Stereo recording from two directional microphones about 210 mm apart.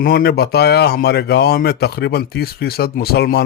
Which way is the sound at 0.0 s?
45° left (ahead or behind).